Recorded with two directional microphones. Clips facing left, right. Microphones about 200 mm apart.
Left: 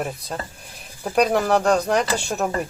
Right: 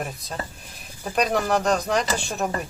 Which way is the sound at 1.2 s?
5° left (ahead or behind).